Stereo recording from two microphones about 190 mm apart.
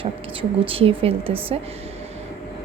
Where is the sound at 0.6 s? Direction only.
30° right (ahead or behind).